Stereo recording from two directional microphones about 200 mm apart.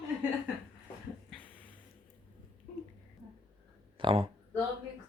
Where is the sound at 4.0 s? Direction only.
25° right (ahead or behind).